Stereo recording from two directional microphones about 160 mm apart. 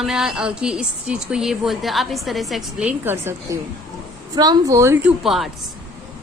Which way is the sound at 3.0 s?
15° right (ahead or behind).